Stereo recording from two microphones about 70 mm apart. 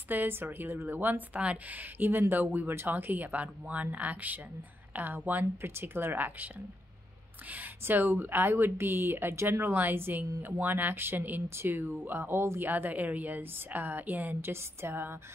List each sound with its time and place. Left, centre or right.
0.1 s a woman's voice: right
14.5 s speech: right